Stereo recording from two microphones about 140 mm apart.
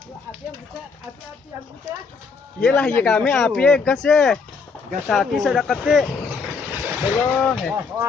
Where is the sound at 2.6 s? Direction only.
10° left (ahead or behind).